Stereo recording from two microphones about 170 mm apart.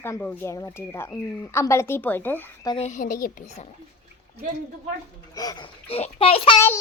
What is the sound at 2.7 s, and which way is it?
Speech, 45° left (ahead or behind).